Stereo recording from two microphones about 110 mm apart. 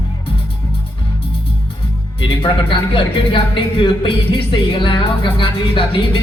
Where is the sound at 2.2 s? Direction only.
50° left (ahead or behind).